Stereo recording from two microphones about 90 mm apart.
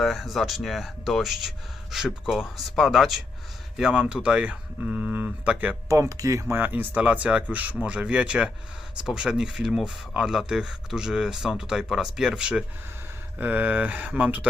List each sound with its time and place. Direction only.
0.0 s speech: centre (ahead or behind); by 5.7 s 15° right (ahead or behind)
5.9 s speech: 40° right (ahead or behind)
6.5 s speech: 20° right (ahead or behind)
13.4 s speech: 20° right (ahead or behind)